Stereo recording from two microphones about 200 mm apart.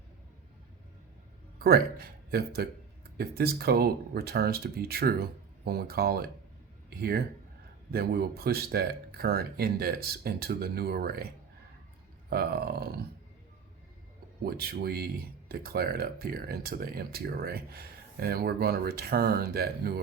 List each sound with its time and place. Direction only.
1.5 s speech: 50° right (ahead or behind)
12.3 s speech: 50° right (ahead or behind)
14.4 s speech: 50° right (ahead or behind)